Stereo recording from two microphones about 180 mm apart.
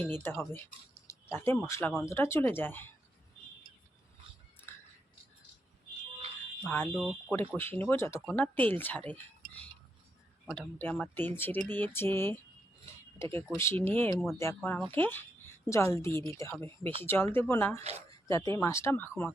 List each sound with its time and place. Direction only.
0.0 s speech: 10° left (ahead or behind)
4.7 s scissors: 10° left (ahead or behind)
6.6 s speech: 10° left (ahead or behind)
6.9 s speech: 5° right (ahead or behind)
7.3 s speech: 10° left (ahead or behind)
10.4 s speech: 5° left (ahead or behind)